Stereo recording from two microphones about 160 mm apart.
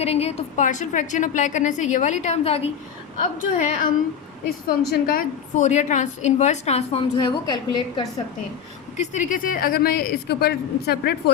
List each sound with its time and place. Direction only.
0.0 s a woman's voice: 40° left (ahead or behind)
3.2 s a woman's voice: 50° left (ahead or behind)
4.7 s a woman's voice: 65° left (ahead or behind); by 7.0 s 40° left (ahead or behind)
7.2 s a woman's voice: 30° left (ahead or behind)
9.0 s a woman's voice: 50° left (ahead or behind); by 11.2 s 85° left